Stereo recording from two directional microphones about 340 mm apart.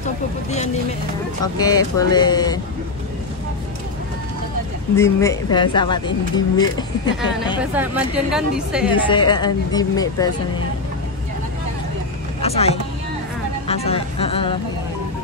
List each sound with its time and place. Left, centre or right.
0.0 s speech: centre
4.9 s speech: centre
7.7 s a woman's voice: centre
8.9 s speech: centre
12.4 s speech: centre